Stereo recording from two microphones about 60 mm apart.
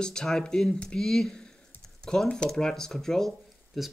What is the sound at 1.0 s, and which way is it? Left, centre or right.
Speech, centre.